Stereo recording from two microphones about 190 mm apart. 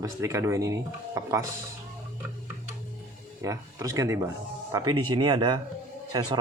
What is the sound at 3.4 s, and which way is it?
A man's voice, 15° right (ahead or behind).